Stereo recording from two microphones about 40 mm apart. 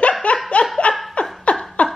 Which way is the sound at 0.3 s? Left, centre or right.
Left.